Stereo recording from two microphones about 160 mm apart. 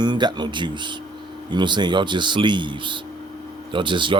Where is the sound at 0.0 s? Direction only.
30° right (ahead or behind).